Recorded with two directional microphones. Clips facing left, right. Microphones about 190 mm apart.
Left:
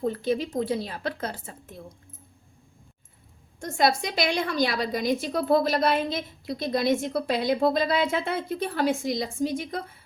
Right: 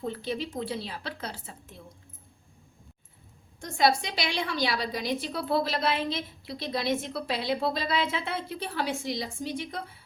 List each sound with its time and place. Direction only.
0.0 s a woman's voice: 45° left (ahead or behind)
3.6 s a woman's voice: 50° left (ahead or behind)